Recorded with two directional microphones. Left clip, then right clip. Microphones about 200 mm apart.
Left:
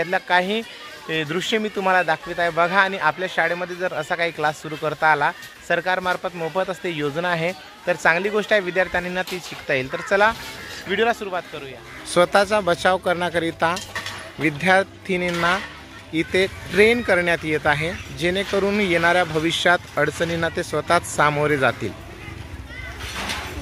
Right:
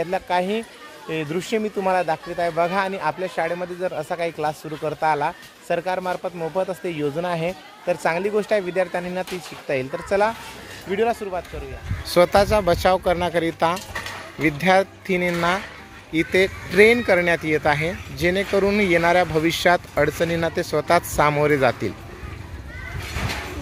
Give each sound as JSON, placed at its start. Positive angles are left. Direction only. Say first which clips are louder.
{"t": 0.0, "sound": "speech", "louder": "left 3 dB", "side_deg": 0}
{"t": 12.1, "sound": "speech", "louder": "right 1 dB", "side_deg": -10}
{"t": 13.7, "sound": "keys jangling", "louder": "left 1 dB", "side_deg": -45}
{"t": 14.4, "sound": "speech", "louder": "even", "side_deg": -10}